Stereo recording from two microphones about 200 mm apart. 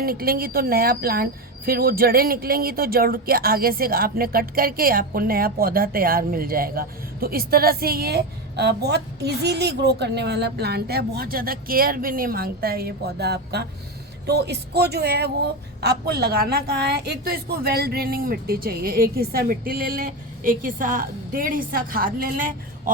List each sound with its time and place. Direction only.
0.0 s speech: 50° right (ahead or behind)